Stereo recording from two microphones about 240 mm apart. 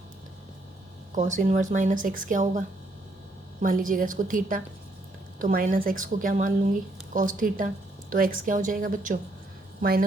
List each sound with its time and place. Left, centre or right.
1.1 s speech: right